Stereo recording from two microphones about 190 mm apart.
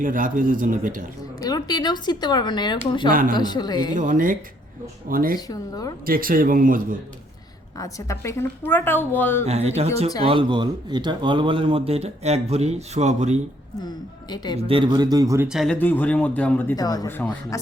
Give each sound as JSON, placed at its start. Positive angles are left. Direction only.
{"t": 0.0, "sound": "speech", "side_deg": -45}
{"t": 1.4, "sound": "speech", "side_deg": 20}
{"t": 3.1, "sound": "speech", "side_deg": -45}
{"t": 3.3, "sound": "speech", "side_deg": 20}
{"t": 3.9, "sound": "speech", "side_deg": -40}
{"t": 5.5, "sound": "speech", "side_deg": 20}
{"t": 6.1, "sound": "speech", "side_deg": -50}
{"t": 7.8, "sound": "speech", "side_deg": 15}
{"t": 9.5, "sound": "speech", "side_deg": -35}
{"t": 13.8, "sound": "speech", "side_deg": 20}
{"t": 14.7, "sound": "a man's voice", "side_deg": -25}
{"t": 15.4, "sound": "speech", "side_deg": 0}